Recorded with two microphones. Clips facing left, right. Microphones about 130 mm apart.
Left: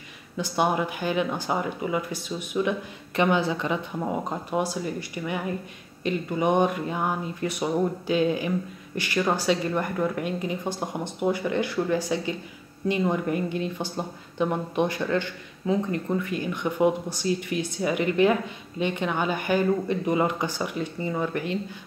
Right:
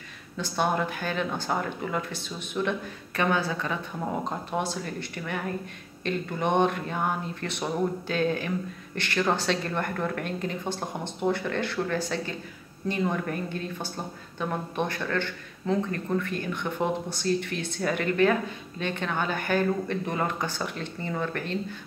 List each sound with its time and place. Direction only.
0.4 s a woman's voice: 15° left (ahead or behind)